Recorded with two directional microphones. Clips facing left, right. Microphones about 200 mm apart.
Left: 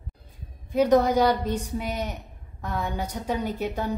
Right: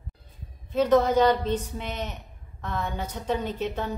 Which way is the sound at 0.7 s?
10° left (ahead or behind).